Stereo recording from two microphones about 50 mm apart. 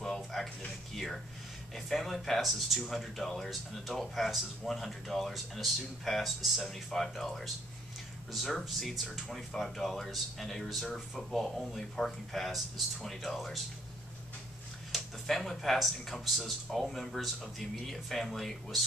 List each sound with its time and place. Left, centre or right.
0.0 s music: centre
0.9 s a sound: centre
1.8 s speech: centre
14.9 s speech: centre